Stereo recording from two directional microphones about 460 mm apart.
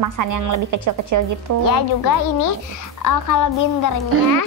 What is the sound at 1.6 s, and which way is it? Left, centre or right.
A child's voice, left.